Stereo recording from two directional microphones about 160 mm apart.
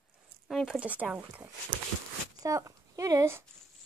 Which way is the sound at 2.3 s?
20° right (ahead or behind).